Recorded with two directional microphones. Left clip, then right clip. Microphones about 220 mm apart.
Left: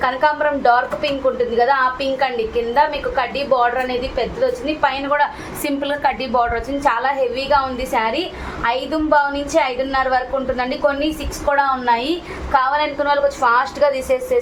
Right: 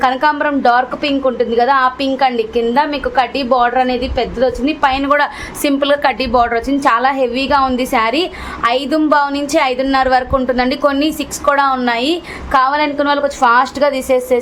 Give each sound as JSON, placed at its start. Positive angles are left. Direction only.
{"t": 0.0, "sound": "a woman's voice", "side_deg": -50}